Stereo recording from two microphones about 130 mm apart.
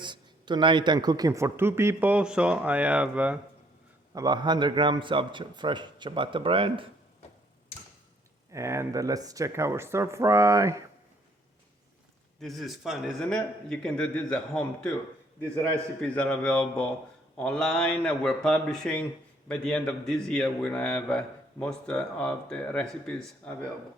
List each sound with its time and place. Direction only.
0.0 s speech: 35° right (ahead or behind); by 3.3 s 10° right (ahead or behind)
4.1 s a man's voice: 30° right (ahead or behind)
8.5 s speech: 20° right (ahead or behind)
12.4 s speech: centre (ahead or behind)
16.0 s a man's voice: 10° left (ahead or behind)